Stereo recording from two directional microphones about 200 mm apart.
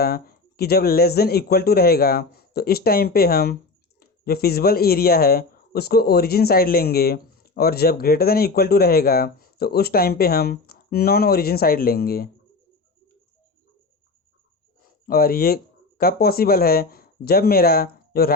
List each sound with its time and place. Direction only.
0.0 s speech: 50° left (ahead or behind)
14.8 s speech: 45° left (ahead or behind)